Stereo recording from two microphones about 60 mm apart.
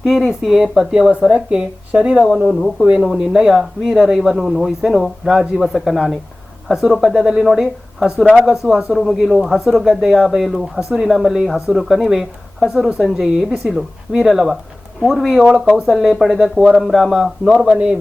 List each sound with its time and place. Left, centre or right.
0.0 s speech: centre
2.4 s speech: centre
3.2 s speech: centre